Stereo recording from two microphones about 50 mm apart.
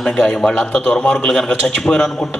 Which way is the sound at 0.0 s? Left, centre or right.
Centre.